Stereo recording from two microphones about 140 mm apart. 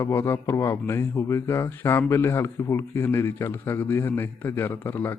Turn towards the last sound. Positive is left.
turn(degrees=15)  # may be behind; listen again after turning